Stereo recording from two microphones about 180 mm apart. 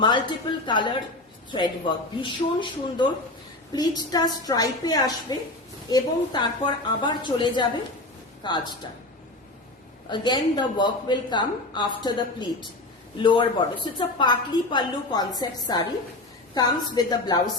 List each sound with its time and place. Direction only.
0.0 s a woman's voice: 25° left (ahead or behind)
10.1 s a woman's voice: 25° left (ahead or behind)